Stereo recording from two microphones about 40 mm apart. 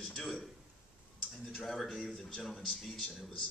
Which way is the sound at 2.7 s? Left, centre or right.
Centre.